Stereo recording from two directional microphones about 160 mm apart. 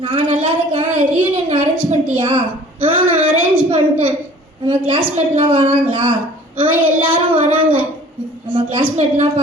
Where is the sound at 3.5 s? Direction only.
35° right (ahead or behind).